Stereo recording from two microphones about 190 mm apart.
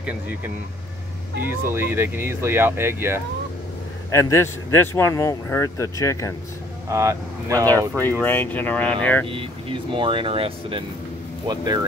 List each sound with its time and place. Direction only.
0.0 s speech: 10° right (ahead or behind)
1.5 s speech: 10° right (ahead or behind)
4.1 s speech: 15° left (ahead or behind)
6.9 s speech: 15° right (ahead or behind)
8.0 s speech: 10° left (ahead or behind)
9.3 s speech: 25° right (ahead or behind)